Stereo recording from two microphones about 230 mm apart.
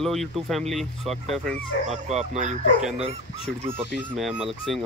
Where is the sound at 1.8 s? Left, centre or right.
Right.